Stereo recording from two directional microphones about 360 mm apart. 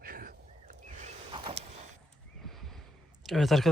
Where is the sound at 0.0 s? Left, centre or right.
Right.